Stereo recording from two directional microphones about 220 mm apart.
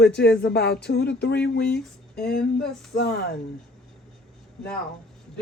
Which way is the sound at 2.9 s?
45° left (ahead or behind).